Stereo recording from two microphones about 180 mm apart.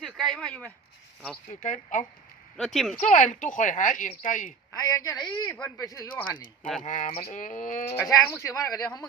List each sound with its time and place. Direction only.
0.0 s speech: centre (ahead or behind)
1.5 s a woman's voice: 45° left (ahead or behind)
2.6 s speech: centre (ahead or behind)
3.1 s a woman's voice: 45° left (ahead or behind)
4.8 s speech: 20° left (ahead or behind)
6.6 s speech: centre (ahead or behind)
6.8 s a woman's voice: 45° left (ahead or behind)
7.1 s a woman's voice: 35° left (ahead or behind)
7.9 s speech: 15° left (ahead or behind)